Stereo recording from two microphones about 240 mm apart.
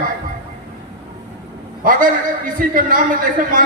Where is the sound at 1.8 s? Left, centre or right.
Right.